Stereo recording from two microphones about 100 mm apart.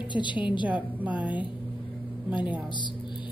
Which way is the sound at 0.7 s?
15° right (ahead or behind).